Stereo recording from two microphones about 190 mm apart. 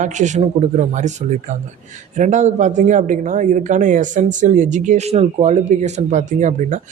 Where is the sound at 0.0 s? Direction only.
40° right (ahead or behind).